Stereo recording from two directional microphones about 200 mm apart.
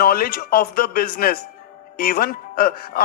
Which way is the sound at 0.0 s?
50° left (ahead or behind).